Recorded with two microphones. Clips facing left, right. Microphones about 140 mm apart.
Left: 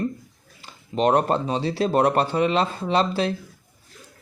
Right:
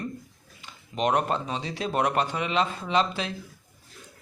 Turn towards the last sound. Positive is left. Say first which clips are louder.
# left 4 dB
turn(degrees=35)  # may be behind; listen again after turning